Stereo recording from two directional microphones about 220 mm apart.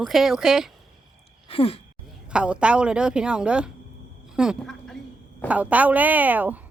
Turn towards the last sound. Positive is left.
turn(degrees=-5)  # may be behind; listen again after turning